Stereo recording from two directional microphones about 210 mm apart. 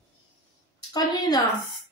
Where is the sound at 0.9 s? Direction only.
20° left (ahead or behind).